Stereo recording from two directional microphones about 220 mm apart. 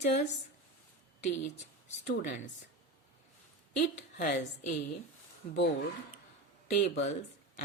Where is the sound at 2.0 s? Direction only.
40° left (ahead or behind).